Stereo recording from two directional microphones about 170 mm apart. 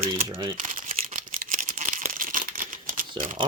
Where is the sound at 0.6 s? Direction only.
45° right (ahead or behind).